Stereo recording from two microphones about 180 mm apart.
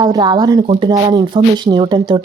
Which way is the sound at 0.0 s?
20° right (ahead or behind).